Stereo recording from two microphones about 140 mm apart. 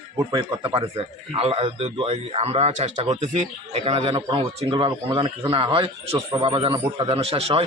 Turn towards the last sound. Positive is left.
turn(degrees=-45)  # may be behind; listen again after turning